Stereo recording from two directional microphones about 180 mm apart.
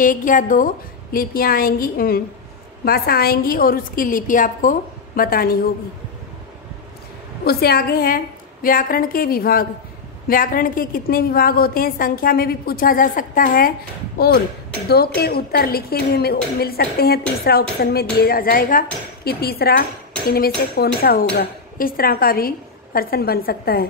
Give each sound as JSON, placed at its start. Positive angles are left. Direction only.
{"t": 0.0, "sound": "a woman's voice", "side_deg": 45}
{"t": 7.4, "sound": "a woman's voice", "side_deg": 55}